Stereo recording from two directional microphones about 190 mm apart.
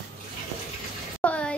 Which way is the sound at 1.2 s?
5° left (ahead or behind).